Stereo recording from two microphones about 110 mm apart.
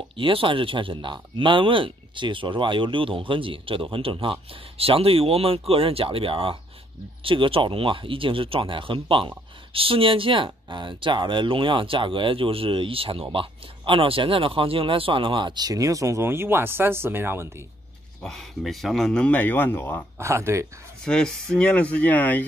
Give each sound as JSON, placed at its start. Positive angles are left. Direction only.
{"t": 0.1, "sound": "speech", "side_deg": -55}
{"t": 18.2, "sound": "speech", "side_deg": 0}
{"t": 20.2, "sound": "speech", "side_deg": -25}
{"t": 21.0, "sound": "speech", "side_deg": 5}